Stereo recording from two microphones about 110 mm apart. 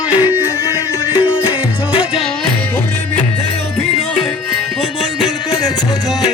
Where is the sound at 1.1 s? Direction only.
40° left (ahead or behind).